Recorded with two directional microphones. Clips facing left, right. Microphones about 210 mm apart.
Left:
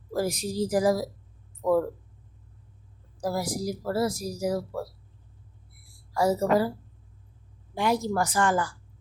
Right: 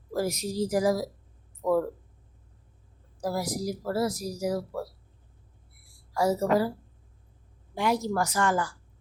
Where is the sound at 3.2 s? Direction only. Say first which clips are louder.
Left 1 dB; 30° left (ahead or behind).